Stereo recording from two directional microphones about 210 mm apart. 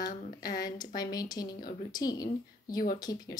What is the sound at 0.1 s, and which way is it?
Speech, 40° left (ahead or behind).